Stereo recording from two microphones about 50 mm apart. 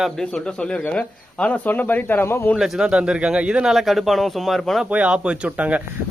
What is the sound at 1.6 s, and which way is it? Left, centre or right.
Speech, left.